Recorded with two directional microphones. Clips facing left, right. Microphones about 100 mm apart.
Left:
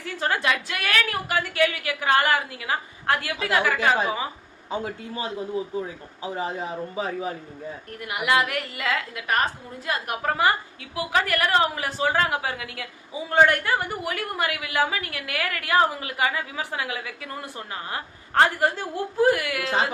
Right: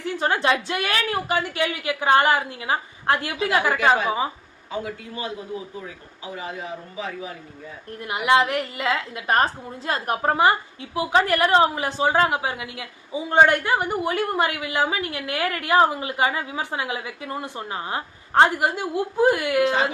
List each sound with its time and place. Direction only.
0.0 s a woman's voice: 20° right (ahead or behind)
4.7 s a man's voice: 30° left (ahead or behind)
7.9 s a woman's voice: 25° right (ahead or behind)